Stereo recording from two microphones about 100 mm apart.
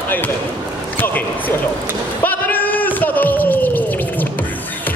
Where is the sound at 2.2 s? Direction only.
20° left (ahead or behind).